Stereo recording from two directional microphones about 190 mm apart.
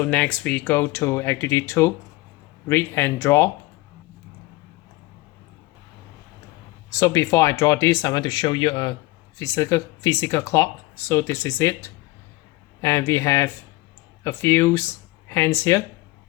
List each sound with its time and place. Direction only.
0.0 s speech: 5° left (ahead or behind)
7.0 s speech: 15° left (ahead or behind)